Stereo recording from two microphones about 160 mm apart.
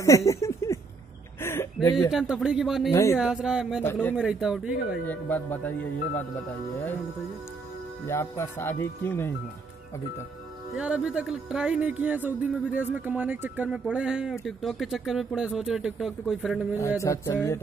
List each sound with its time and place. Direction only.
0.0 s a sound: 20° left (ahead or behind)
2.0 s speech: centre (ahead or behind)
2.9 s speech: 20° left (ahead or behind)
3.2 s speech: 5° right (ahead or behind)
3.8 s speech: 10° left (ahead or behind)
4.2 s speech: 5° right (ahead or behind)
5.0 s speech: 10° left (ahead or behind)
8.1 s speech: 15° left (ahead or behind)
10.7 s speech: 5° right (ahead or behind)
17.0 s speech: 20° left (ahead or behind)